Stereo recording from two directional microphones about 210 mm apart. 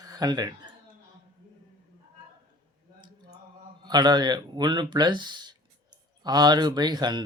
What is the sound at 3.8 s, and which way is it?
Speech, 20° right (ahead or behind).